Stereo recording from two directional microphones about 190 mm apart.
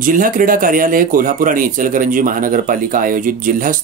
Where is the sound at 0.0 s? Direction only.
45° right (ahead or behind).